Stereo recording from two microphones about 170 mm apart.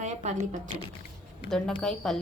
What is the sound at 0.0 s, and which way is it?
Speech, 45° right (ahead or behind).